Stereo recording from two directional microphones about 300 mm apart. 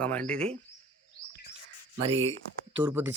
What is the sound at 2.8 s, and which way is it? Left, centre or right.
Speech, centre.